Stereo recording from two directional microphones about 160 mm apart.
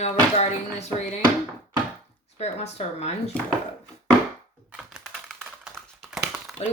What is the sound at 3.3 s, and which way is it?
Speech, 10° left (ahead or behind).